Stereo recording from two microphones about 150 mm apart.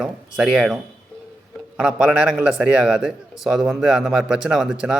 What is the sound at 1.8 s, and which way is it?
A man's voice, 5° right (ahead or behind).